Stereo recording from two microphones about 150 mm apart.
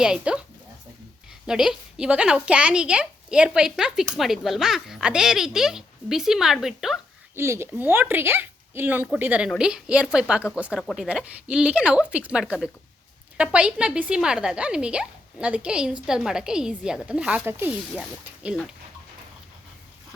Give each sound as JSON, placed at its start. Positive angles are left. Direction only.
{"t": 0.0, "sound": "speech", "side_deg": -5}
{"t": 1.5, "sound": "a woman's voice", "side_deg": -5}
{"t": 7.3, "sound": "a woman's voice", "side_deg": -15}